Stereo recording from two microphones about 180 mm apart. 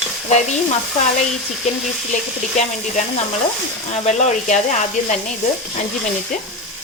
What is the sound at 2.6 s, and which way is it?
Sizzle, 40° left (ahead or behind).